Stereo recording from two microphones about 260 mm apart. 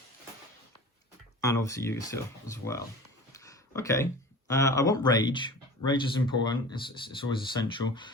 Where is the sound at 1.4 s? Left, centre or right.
Centre.